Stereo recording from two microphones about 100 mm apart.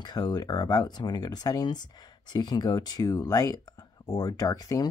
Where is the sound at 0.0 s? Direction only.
45° left (ahead or behind).